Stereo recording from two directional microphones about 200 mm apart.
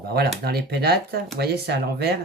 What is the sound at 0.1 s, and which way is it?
Speech, 50° right (ahead or behind).